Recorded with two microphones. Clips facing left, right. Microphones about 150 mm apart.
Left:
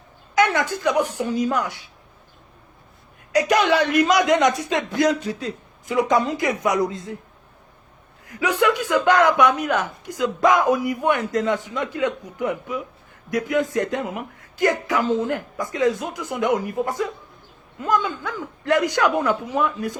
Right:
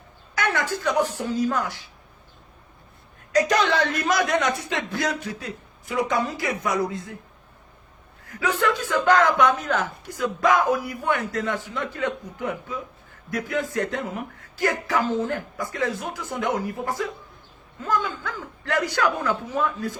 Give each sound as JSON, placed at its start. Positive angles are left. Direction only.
{"t": 0.3, "sound": "speech", "side_deg": 20}
{"t": 3.3, "sound": "a man's voice", "side_deg": 15}
{"t": 8.3, "sound": "speech", "side_deg": 15}